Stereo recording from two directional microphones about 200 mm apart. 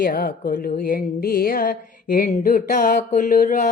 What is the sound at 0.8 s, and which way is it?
Music, 50° left (ahead or behind).